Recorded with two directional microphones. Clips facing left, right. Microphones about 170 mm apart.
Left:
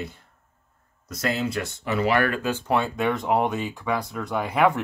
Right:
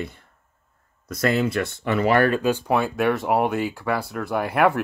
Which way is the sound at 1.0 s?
55° right (ahead or behind).